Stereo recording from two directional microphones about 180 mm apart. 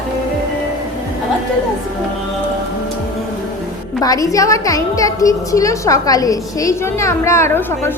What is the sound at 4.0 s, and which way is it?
A woman's voice, 20° left (ahead or behind).